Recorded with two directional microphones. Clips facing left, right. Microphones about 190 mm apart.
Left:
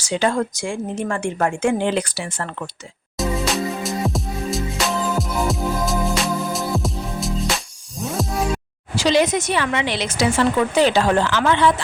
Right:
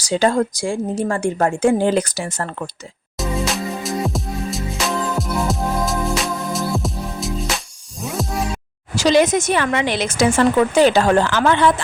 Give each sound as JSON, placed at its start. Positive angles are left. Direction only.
{"t": 0.0, "sound": "speech", "side_deg": -35}
{"t": 3.2, "sound": "music", "side_deg": 0}
{"t": 9.0, "sound": "a woman's voice", "side_deg": -45}